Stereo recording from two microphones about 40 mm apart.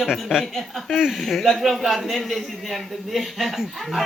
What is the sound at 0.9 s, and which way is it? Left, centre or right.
A man's voice, centre.